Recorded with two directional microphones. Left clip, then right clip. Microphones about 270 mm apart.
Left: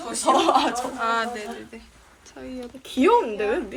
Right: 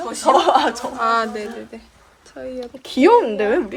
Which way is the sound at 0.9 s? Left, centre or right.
Centre.